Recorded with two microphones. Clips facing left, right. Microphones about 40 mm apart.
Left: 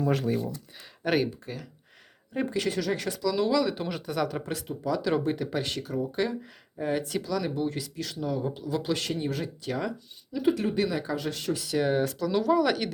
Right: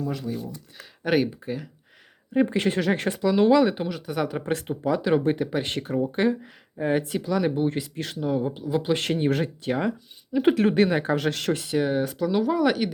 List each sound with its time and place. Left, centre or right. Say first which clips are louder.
0.1 s speech: left 4 dB; left
0.8 s speech: right 3 dB; centre
2.5 s speech: right 5 dB; right
3.8 s speech: right 2 dB; centre
4.1 s speech: right 1 dB; centre
4.4 s speech: right 5 dB; right
5.6 s speech: right 5 dB; right
8.3 s speech: right 5 dB; right
9.0 s speech: right 7 dB; right
10.4 s speech: right 6 dB; right
11.8 s speech: left 1 dB; centre